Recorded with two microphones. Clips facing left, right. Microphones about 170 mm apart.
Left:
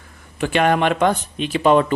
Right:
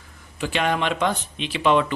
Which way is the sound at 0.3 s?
55° left (ahead or behind).